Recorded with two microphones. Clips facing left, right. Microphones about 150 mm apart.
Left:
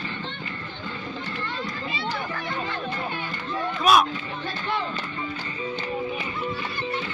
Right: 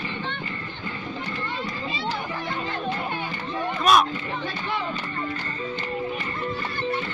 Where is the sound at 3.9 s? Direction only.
5° left (ahead or behind).